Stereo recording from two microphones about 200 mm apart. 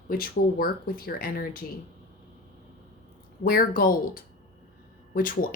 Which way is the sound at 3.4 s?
45° left (ahead or behind).